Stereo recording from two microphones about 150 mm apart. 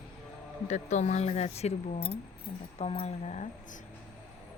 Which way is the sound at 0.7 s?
50° left (ahead or behind).